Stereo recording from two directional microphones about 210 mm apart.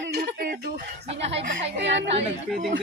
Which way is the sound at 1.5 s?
60° right (ahead or behind).